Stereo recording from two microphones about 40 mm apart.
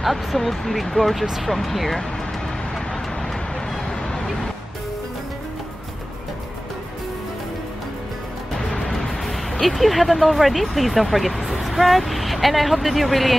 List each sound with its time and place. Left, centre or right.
0.0 s speech: centre
3.7 s a sound: centre
8.5 s music: centre
8.9 s speech: centre